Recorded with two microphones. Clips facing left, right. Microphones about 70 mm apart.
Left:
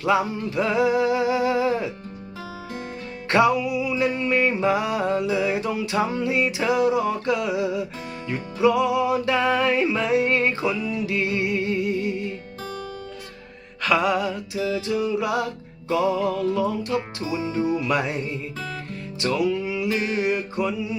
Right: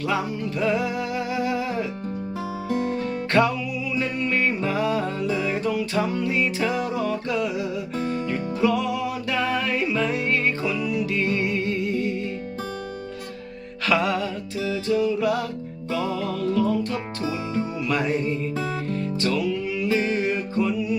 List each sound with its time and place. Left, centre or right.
0.0 s music: left
3.3 s music: centre
13.8 s music: centre
14.6 s music: left
19.9 s music: right
20.2 s music: centre